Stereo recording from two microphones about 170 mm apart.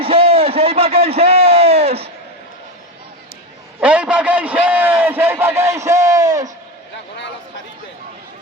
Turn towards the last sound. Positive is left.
turn(degrees=-20)  # may be behind; listen again after turning